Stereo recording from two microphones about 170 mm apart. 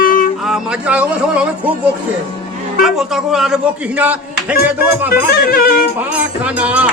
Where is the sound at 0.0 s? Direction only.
55° left (ahead or behind).